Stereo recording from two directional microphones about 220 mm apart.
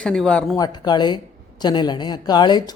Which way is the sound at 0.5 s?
20° left (ahead or behind).